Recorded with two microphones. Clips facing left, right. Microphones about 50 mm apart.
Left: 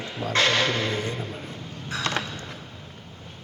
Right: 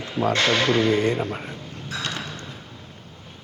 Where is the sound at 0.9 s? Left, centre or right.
Right.